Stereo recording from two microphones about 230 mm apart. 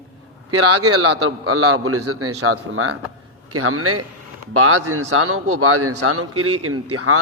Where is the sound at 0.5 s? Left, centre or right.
Right.